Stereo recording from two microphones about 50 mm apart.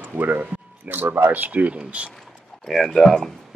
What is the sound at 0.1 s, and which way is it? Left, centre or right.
Speech, right.